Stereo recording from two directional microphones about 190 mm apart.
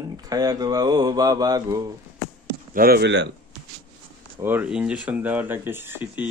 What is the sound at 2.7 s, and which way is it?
Speech, 50° right (ahead or behind).